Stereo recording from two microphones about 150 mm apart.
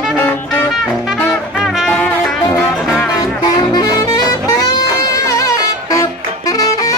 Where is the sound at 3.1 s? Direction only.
25° left (ahead or behind).